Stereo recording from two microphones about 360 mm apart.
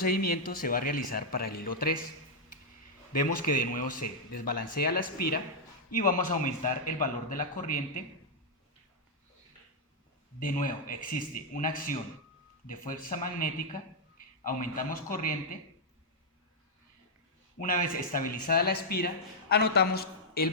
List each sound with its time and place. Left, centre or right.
0.0 s speech: left
3.1 s speech: left
10.4 s speech: left
17.6 s speech: left